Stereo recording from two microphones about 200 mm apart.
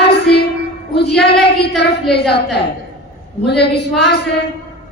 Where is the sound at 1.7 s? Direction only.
55° left (ahead or behind).